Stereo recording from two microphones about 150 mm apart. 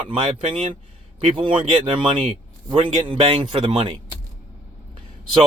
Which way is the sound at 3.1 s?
35° right (ahead or behind).